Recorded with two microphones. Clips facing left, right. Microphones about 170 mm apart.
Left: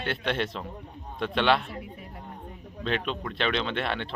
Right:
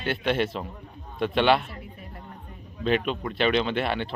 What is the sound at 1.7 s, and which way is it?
Speech, 10° left (ahead or behind).